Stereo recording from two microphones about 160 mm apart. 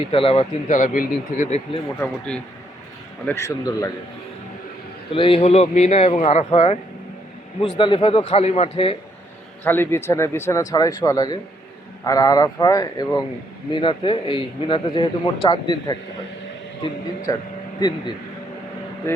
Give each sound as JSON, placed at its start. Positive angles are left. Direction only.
{"t": 0.1, "sound": "speech", "side_deg": 35}
{"t": 0.7, "sound": "speech", "side_deg": 55}
{"t": 2.0, "sound": "speech", "side_deg": 5}
{"t": 3.2, "sound": "a man's voice", "side_deg": 20}
{"t": 5.1, "sound": "speech", "side_deg": 35}
{"t": 9.6, "sound": "a man's voice", "side_deg": 15}
{"t": 13.7, "sound": "speech", "side_deg": 35}
{"t": 17.3, "sound": "a man's voice", "side_deg": 25}